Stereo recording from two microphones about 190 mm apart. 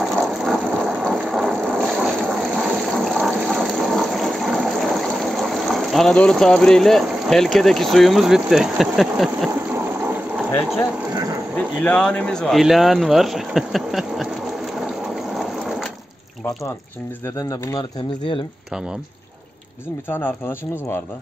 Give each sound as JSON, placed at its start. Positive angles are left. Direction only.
{"t": 0.0, "sound": "a sound", "side_deg": 0}
{"t": 9.8, "sound": "water", "side_deg": -10}
{"t": 11.5, "sound": "speech", "side_deg": 5}
{"t": 17.2, "sound": "speech", "side_deg": 20}
{"t": 18.7, "sound": "speech", "side_deg": -5}
{"t": 20.1, "sound": "speech", "side_deg": 10}